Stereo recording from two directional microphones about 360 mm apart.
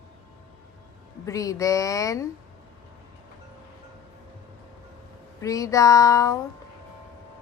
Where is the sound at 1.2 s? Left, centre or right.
Centre.